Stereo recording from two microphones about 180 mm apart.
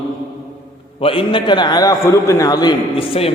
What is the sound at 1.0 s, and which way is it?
A man's voice, 30° left (ahead or behind).